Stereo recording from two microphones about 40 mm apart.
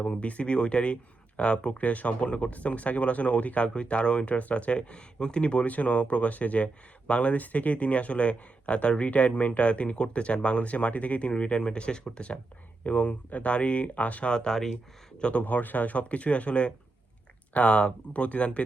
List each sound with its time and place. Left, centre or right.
0.0 s speech: left
14.3 s speech: centre
15.2 s speech: left